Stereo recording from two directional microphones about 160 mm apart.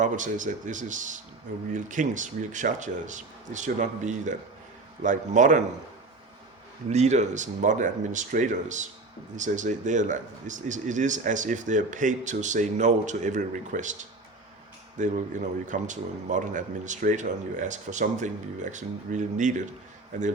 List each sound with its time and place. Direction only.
0.0 s speech: 55° right (ahead or behind)
6.9 s speech: 45° right (ahead or behind)